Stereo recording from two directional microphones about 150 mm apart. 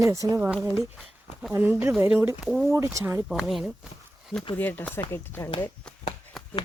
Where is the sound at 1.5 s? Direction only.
15° right (ahead or behind).